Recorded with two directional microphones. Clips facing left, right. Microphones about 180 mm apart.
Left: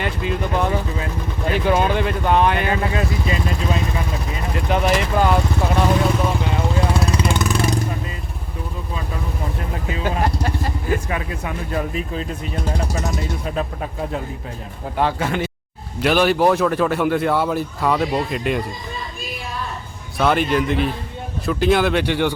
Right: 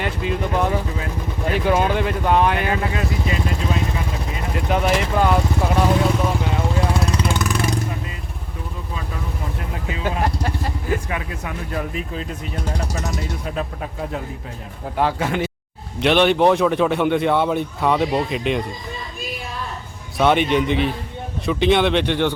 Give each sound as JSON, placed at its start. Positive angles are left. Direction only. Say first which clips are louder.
{"t": 0.0, "sound": "a man's voice", "louder": "even", "side_deg": 0}
{"t": 4.5, "sound": "speech", "louder": "left 1 dB", "side_deg": 0}
{"t": 7.2, "sound": "vehicle", "louder": "left 2 dB", "side_deg": 20}
{"t": 10.0, "sound": "a sound", "louder": "left 1 dB", "side_deg": 0}
{"t": 11.1, "sound": "speech", "louder": "left 2 dB", "side_deg": 25}
{"t": 14.9, "sound": "a man's voice", "louder": "even", "side_deg": -5}
{"t": 20.1, "sound": "a man's voice", "louder": "right 1 dB", "side_deg": 0}